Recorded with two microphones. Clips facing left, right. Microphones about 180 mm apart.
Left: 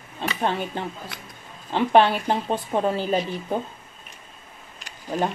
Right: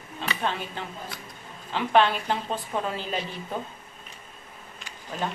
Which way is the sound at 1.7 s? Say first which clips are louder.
Left 4 dB; 35° left (ahead or behind).